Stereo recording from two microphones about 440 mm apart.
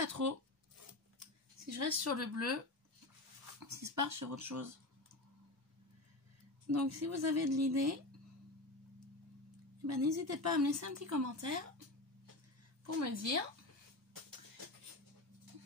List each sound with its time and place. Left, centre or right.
0.0 s a woman's voice: right
1.6 s a woman's voice: right
3.5 s a woman's voice: right
6.7 s a woman's voice: right
9.8 s a woman's voice: right
12.8 s a woman's voice: right